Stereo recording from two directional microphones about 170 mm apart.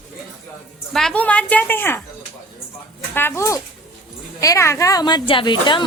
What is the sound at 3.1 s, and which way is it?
Speech, 15° left (ahead or behind).